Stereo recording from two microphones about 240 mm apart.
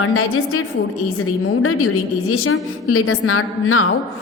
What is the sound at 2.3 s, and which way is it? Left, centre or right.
A woman's voice, left.